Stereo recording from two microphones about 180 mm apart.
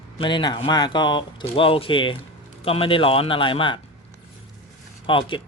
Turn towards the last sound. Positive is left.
turn(degrees=30)  # may be behind; listen again after turning